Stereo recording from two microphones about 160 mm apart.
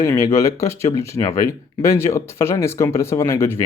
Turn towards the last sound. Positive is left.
turn(degrees=20)  # may be behind; listen again after turning